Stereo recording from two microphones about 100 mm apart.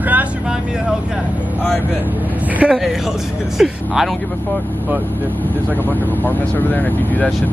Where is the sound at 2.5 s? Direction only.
10° right (ahead or behind).